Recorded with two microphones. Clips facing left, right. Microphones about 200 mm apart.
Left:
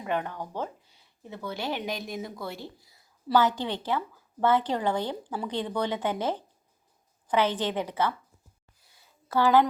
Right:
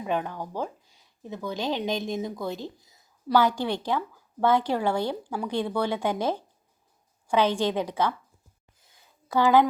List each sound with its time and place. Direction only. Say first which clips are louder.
0.0 s speech: right 2 dB; 10° right (ahead or behind)
9.3 s speech: right 2 dB; 15° right (ahead or behind)